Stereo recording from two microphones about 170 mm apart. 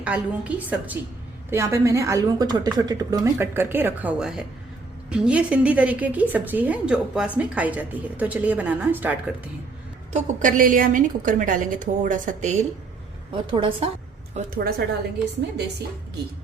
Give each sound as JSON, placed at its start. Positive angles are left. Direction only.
{"t": 0.0, "sound": "a woman's voice", "side_deg": -10}
{"t": 10.1, "sound": "a woman's voice", "side_deg": -45}
{"t": 13.3, "sound": "a woman's voice", "side_deg": -30}
{"t": 14.3, "sound": "a woman's voice", "side_deg": -60}